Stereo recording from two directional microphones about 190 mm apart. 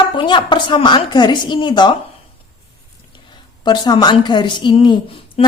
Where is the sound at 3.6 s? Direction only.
25° left (ahead or behind).